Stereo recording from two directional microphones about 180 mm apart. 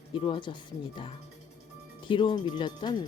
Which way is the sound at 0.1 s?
30° left (ahead or behind).